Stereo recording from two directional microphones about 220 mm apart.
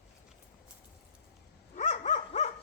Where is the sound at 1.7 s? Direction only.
30° left (ahead or behind).